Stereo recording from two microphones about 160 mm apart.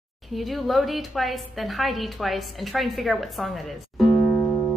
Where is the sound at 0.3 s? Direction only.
Centre (ahead or behind).